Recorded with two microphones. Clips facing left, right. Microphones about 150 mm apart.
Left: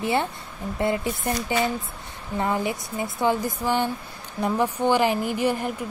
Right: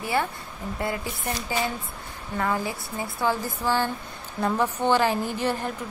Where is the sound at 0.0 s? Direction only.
25° left (ahead or behind).